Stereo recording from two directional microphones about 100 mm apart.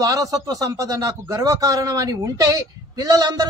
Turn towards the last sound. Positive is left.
turn(degrees=-40)  # may be behind; listen again after turning